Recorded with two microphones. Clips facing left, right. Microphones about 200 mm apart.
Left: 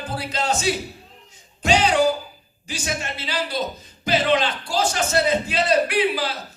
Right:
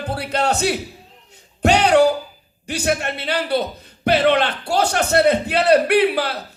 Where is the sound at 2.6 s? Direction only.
65° right (ahead or behind).